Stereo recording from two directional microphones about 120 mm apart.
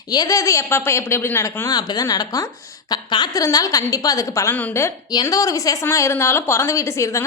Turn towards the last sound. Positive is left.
turn(degrees=25)  # may be behind; listen again after turning